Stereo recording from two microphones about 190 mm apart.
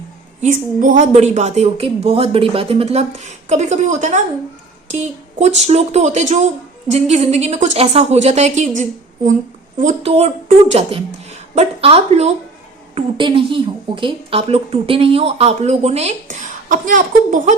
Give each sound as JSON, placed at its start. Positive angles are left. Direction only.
{"t": 0.4, "sound": "a woman's voice", "side_deg": -40}